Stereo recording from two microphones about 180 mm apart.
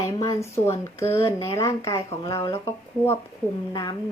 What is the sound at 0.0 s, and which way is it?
Speech, 15° left (ahead or behind).